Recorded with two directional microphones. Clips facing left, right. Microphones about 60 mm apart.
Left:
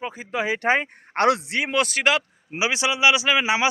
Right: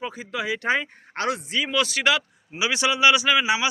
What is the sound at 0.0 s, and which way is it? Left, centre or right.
Speech, left.